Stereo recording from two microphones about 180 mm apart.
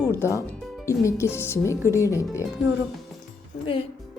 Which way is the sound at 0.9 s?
15° left (ahead or behind).